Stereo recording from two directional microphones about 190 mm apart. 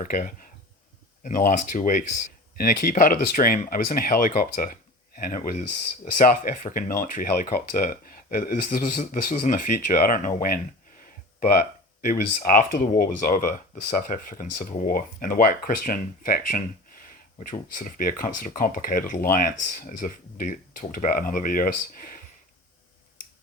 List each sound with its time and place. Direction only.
0.0 s speech: 45° left (ahead or behind)
12.0 s speech: 45° left (ahead or behind)